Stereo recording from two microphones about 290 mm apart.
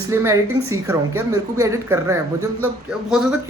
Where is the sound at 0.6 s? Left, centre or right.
Right.